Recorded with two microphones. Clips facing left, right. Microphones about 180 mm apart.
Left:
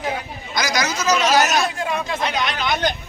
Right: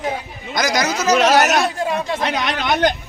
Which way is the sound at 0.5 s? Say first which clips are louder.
Right 3 dB; 50° right (ahead or behind).